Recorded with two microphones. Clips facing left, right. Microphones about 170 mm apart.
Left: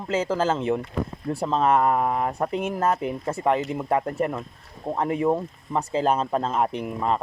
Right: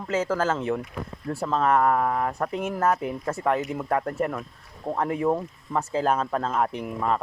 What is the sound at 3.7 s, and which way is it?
Speech, 15° left (ahead or behind).